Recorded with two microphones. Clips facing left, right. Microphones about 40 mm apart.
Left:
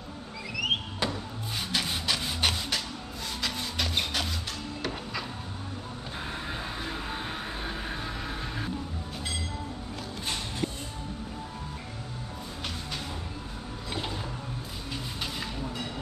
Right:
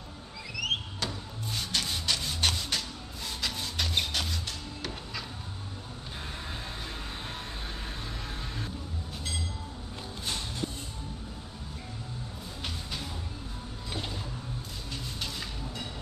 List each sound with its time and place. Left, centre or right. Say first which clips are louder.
0.6 s rub: left 3 dB; centre
3.3 s music: left 2 dB; centre
6.2 s vehicle: left 5 dB; centre
10.6 s music: left 4 dB; left